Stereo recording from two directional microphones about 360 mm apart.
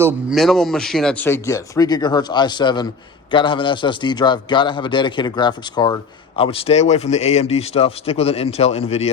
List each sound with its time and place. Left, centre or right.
0.0 s a man's voice: centre